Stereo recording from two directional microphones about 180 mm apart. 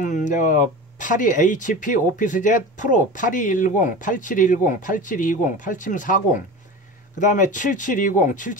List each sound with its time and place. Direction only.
0.0 s speech: 45° left (ahead or behind)